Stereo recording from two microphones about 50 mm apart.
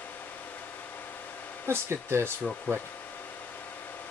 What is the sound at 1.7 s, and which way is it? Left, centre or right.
Speech, right.